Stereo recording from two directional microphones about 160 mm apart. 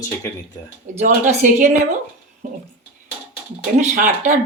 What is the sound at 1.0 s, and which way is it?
A woman's voice, 50° right (ahead or behind).